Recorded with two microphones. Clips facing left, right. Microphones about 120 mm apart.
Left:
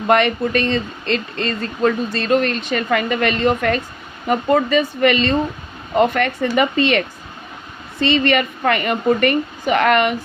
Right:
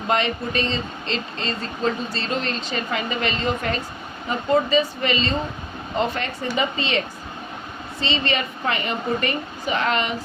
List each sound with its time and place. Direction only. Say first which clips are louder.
0.1 s speech: left 7 dB; 60° left (ahead or behind)
8.0 s speech: left 8 dB; 60° left (ahead or behind)